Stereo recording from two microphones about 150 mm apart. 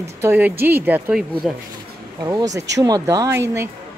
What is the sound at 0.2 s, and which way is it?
Speech, 15° right (ahead or behind).